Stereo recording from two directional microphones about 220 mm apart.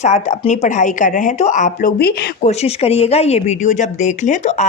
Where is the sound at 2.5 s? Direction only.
30° left (ahead or behind).